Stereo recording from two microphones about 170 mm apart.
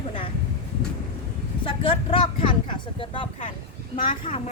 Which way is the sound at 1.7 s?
30° left (ahead or behind).